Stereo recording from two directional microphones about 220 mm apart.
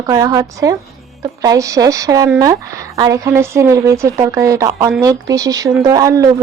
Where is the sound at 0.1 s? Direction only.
15° right (ahead or behind).